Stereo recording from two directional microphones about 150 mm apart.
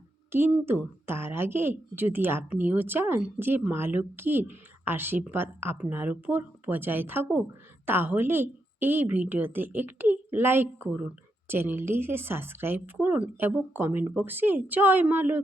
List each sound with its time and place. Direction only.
0.3 s a woman's voice: 15° right (ahead or behind)